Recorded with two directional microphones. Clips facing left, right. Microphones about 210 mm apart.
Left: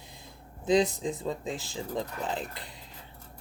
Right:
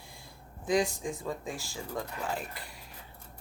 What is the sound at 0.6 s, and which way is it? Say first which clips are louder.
Speech: left 4 dB; 20° left (ahead or behind).